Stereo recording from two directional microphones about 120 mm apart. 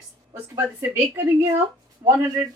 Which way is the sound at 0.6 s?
20° right (ahead or behind).